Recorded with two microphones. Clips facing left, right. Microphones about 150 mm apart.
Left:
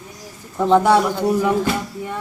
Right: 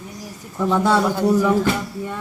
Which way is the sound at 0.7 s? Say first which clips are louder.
Left 3 dB; 20° left (ahead or behind).